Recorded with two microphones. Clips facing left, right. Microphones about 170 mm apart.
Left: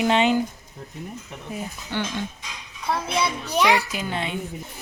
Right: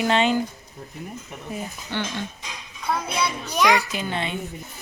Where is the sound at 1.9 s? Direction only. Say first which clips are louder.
Left 1 dB; 10° left (ahead or behind).